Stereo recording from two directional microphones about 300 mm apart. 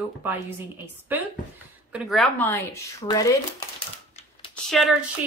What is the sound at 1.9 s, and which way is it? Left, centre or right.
Speech, centre.